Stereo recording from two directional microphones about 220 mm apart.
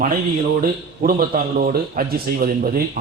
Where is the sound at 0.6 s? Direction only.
40° right (ahead or behind).